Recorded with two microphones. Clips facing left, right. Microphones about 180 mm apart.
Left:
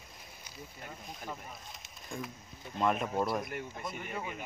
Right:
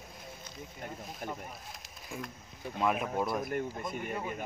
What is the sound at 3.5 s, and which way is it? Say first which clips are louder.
Speech: right 5 dB; 50° right (ahead or behind).